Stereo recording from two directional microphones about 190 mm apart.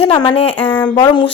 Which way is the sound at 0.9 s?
25° left (ahead or behind).